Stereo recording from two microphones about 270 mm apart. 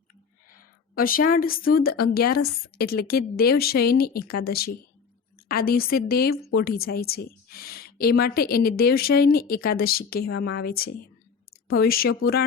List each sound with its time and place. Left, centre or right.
0.9 s a woman's voice: left